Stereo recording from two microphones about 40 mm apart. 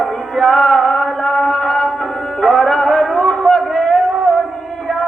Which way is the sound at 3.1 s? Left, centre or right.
Left.